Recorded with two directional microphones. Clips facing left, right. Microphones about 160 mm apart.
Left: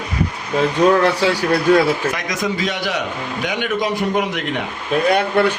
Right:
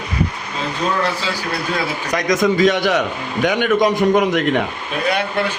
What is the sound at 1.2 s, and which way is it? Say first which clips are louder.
Speech: left 7 dB; 65° left (ahead or behind).